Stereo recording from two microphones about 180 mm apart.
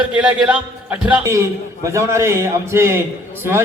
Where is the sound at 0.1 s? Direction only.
5° right (ahead or behind).